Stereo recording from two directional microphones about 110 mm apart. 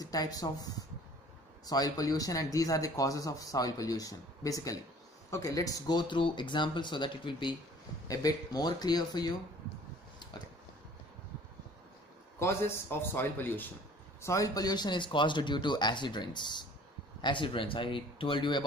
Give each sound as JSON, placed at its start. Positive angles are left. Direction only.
{"t": 0.0, "sound": "speech", "side_deg": 35}
{"t": 8.1, "sound": "speech", "side_deg": 35}
{"t": 12.4, "sound": "speech", "side_deg": 25}
{"t": 14.2, "sound": "speech", "side_deg": 30}